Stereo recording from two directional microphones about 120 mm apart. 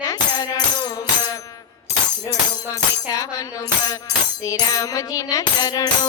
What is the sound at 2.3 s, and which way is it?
Music, 30° left (ahead or behind).